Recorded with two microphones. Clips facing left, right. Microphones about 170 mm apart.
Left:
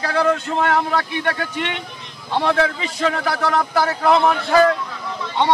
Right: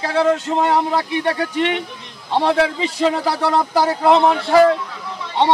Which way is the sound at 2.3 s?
25° right (ahead or behind).